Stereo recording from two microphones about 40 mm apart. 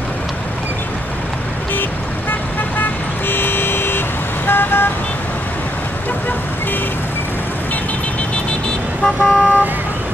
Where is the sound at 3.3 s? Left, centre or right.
Left.